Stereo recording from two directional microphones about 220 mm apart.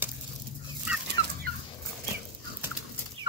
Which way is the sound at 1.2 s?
20° left (ahead or behind).